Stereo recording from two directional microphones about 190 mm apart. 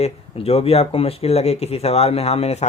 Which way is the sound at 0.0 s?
30° left (ahead or behind).